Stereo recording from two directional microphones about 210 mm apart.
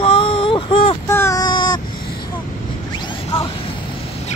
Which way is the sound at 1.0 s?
10° left (ahead or behind).